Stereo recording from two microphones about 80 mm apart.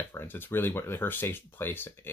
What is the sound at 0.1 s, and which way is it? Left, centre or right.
Speech, left.